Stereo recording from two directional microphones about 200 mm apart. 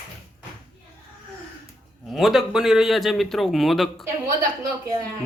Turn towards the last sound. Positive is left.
turn(degrees=-20)  # may be behind; listen again after turning